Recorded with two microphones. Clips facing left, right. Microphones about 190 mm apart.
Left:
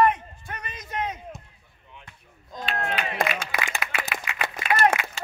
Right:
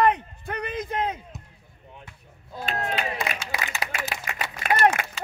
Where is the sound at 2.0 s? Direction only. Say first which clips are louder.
Right 2 dB; 10° right (ahead or behind).